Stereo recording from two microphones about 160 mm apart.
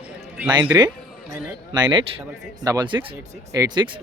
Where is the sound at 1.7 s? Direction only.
25° right (ahead or behind).